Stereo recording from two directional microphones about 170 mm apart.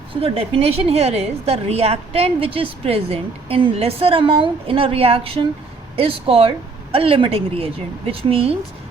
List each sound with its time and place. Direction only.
0.1 s a woman's voice: 35° right (ahead or behind)